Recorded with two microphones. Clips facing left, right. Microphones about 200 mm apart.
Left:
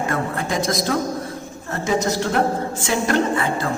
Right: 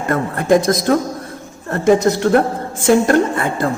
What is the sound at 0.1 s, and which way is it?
A woman's voice, 50° right (ahead or behind).